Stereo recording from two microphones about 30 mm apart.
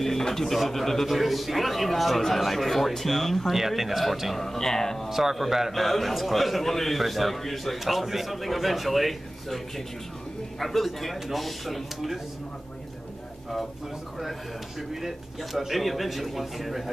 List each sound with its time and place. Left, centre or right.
0.2 s a man's voice: centre
3.5 s a man's voice: centre
4.4 s speech: centre
5.1 s a man's voice: centre
10.6 s a man's voice: centre
11.1 s a man's voice: centre
14.8 s a man's voice: centre